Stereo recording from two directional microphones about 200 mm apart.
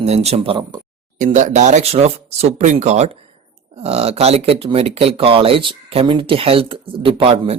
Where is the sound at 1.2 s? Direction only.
35° right (ahead or behind).